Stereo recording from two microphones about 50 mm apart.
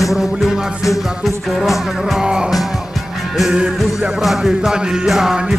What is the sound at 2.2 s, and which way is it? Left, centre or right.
Music, centre.